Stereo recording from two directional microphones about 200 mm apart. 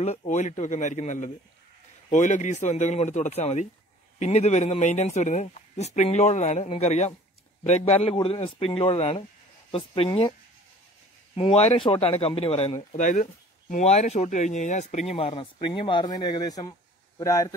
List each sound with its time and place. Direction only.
0.0 s a man's voice: 30° left (ahead or behind)
11.3 s a man's voice: 30° left (ahead or behind)